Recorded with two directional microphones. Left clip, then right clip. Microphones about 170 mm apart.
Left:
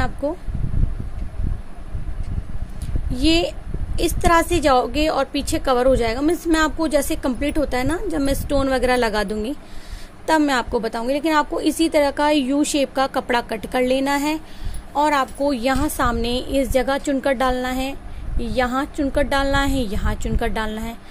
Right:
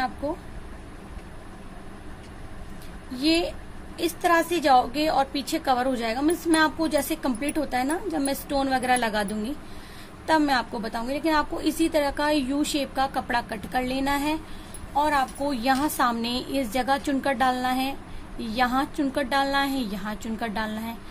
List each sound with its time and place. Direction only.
3.2 s a woman's voice: 35° left (ahead or behind)